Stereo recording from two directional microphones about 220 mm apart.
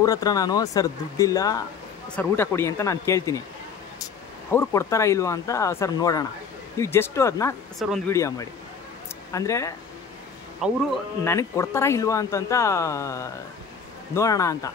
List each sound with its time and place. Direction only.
0.0 s speech: 15° left (ahead or behind)
10.6 s speech: 5° right (ahead or behind)
11.2 s speech: 10° left (ahead or behind)